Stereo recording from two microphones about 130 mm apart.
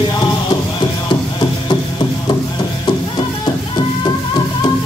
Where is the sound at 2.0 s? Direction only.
40° left (ahead or behind).